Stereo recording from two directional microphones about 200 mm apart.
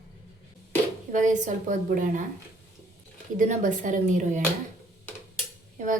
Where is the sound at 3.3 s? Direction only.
40° right (ahead or behind).